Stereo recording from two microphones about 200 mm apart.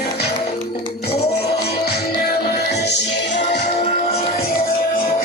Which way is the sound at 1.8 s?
50° left (ahead or behind).